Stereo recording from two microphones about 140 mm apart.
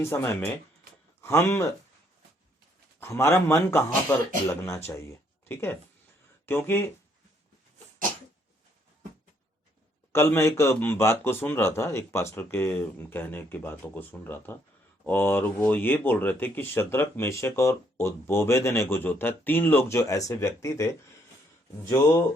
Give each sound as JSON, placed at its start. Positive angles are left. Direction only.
{"t": 0.0, "sound": "speech", "side_deg": 20}
{"t": 3.0, "sound": "speech", "side_deg": 20}
{"t": 10.1, "sound": "speech", "side_deg": 15}